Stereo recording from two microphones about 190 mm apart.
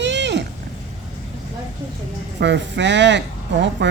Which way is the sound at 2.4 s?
70° right (ahead or behind).